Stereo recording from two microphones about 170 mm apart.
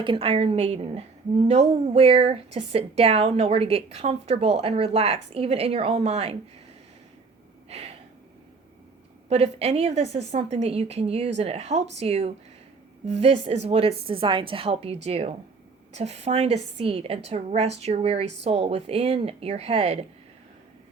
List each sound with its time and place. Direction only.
0.0 s speech: 30° right (ahead or behind)
7.7 s a sound: 40° right (ahead or behind)
9.3 s speech: 40° right (ahead or behind)